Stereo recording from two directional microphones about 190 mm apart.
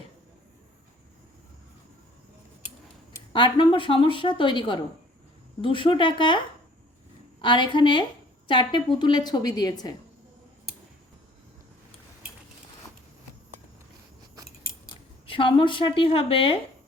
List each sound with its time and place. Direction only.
3.3 s a woman's voice: 25° left (ahead or behind)
7.4 s a woman's voice: 25° left (ahead or behind)
14.8 s speech: 25° left (ahead or behind)